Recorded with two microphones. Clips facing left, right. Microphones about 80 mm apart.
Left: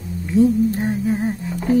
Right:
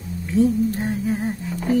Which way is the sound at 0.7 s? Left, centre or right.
Centre.